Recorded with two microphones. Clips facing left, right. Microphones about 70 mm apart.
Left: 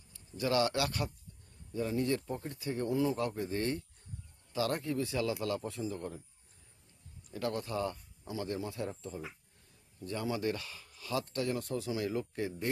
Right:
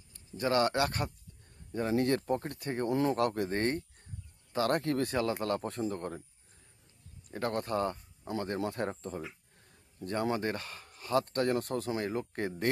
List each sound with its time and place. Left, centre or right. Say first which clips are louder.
0.4 s speech: right 2 dB; right
1.9 s speech: right 6 dB; right
3.5 s speech: right 3 dB; right
5.1 s speech: right 3 dB; right
7.3 s speech: right 3 dB; right